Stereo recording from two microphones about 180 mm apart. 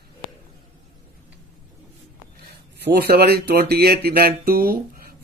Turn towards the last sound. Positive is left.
turn(degrees=-55)  # may be behind; listen again after turning